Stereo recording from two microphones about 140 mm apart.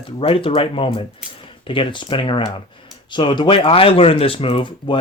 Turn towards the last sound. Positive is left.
turn(degrees=35)  # may be behind; listen again after turning